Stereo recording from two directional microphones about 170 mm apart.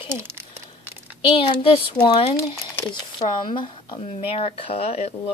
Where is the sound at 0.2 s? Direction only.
15° right (ahead or behind).